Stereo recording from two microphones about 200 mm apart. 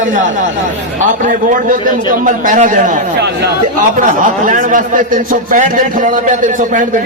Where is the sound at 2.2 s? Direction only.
40° right (ahead or behind).